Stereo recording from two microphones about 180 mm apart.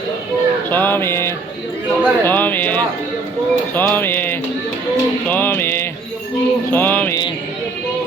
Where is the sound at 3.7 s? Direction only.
10° left (ahead or behind).